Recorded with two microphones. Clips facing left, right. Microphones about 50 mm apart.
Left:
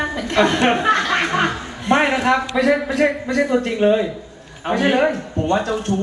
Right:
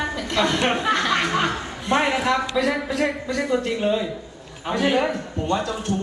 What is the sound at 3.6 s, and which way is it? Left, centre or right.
A man's voice, left.